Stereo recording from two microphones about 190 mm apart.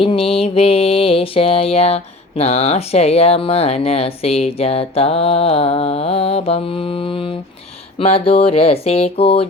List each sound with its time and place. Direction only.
0.0 s music: 30° left (ahead or behind)